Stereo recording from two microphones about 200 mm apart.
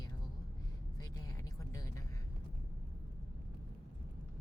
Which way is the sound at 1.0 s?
15° left (ahead or behind).